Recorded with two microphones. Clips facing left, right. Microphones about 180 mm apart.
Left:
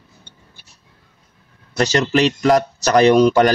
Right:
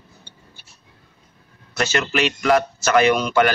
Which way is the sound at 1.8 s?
35° left (ahead or behind).